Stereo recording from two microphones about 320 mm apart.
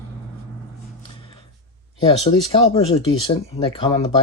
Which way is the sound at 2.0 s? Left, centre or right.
Centre.